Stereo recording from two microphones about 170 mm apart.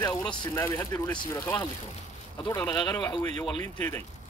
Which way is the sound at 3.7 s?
10° left (ahead or behind).